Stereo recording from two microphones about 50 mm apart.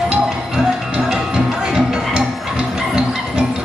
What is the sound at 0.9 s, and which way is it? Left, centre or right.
Music, centre.